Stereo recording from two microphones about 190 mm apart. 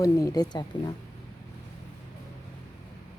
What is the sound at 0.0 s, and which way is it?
Speech, 15° left (ahead or behind).